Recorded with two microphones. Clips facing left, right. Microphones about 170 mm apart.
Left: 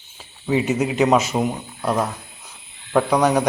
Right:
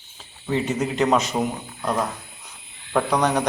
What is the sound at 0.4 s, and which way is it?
Speech, 10° left (ahead or behind).